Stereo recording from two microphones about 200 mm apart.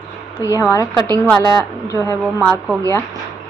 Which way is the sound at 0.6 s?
15° left (ahead or behind).